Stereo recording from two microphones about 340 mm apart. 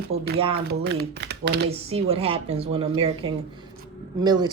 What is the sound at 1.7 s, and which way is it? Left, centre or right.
Speech, centre.